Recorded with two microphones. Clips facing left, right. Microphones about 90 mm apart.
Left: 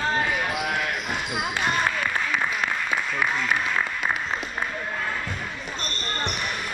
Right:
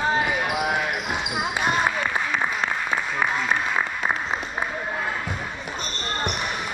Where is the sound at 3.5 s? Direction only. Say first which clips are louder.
Right 1 dB; 15° right (ahead or behind).